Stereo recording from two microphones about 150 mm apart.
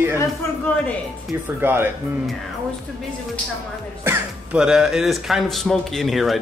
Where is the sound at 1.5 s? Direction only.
15° right (ahead or behind).